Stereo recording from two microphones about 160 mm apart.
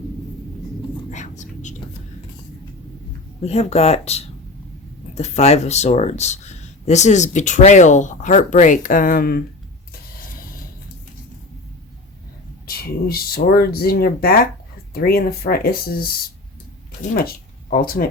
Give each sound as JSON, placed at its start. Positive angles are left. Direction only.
{"t": 1.1, "sound": "whispering", "side_deg": 50}
{"t": 3.4, "sound": "speech", "side_deg": 40}
{"t": 12.6, "sound": "speech", "side_deg": 70}
{"t": 17.2, "sound": "speech", "side_deg": 65}